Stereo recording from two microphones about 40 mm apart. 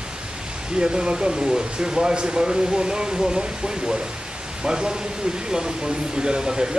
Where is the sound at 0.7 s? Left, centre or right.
Right.